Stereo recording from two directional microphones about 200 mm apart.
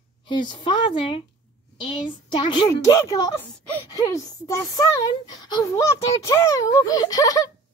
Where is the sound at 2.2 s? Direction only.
25° left (ahead or behind).